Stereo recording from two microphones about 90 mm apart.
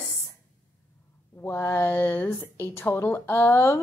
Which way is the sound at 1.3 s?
25° left (ahead or behind).